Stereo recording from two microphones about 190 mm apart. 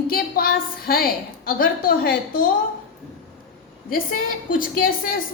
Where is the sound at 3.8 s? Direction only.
50° left (ahead or behind).